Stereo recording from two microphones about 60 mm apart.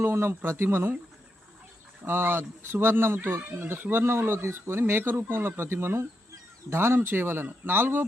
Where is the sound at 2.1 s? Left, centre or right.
Right.